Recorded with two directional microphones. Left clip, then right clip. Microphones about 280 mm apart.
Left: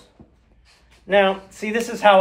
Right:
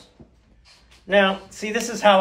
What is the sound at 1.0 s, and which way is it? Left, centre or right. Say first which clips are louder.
A man's voice: left 1 dB; left.